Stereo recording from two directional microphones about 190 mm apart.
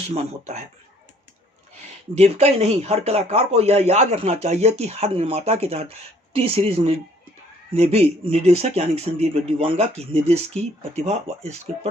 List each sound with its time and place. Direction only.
0.1 s speech: 35° right (ahead or behind)
2.1 s speech: 35° right (ahead or behind)